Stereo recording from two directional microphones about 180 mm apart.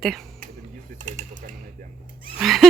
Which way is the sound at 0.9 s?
40° right (ahead or behind).